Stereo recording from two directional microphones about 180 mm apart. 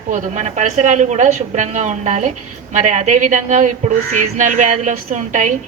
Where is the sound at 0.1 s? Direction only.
40° right (ahead or behind).